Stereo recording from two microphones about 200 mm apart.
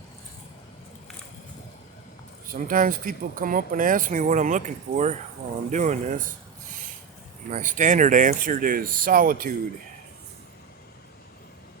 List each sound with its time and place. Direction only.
2.5 s speech: 45° right (ahead or behind)
7.5 s speech: 40° right (ahead or behind)